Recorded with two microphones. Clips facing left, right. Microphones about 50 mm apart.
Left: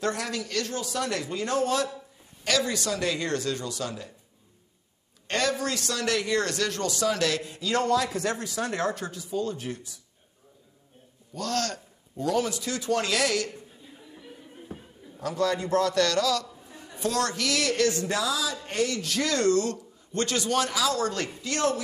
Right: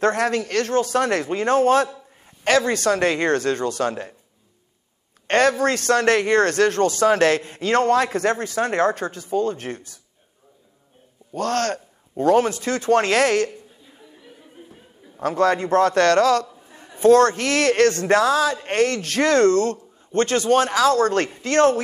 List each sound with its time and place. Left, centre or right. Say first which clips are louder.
0.0 s a man's voice: right 10 dB; right
5.3 s a man's voice: right 9 dB; right
11.3 s a man's voice: right 7 dB; right
14.7 s a sound: left 6 dB; left
15.1 s a man's voice: right 8 dB; right
16.6 s a man's voice: right 15 dB; right